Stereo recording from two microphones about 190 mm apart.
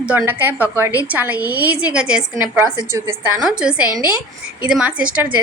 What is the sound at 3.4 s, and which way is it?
A woman's voice, 5° right (ahead or behind).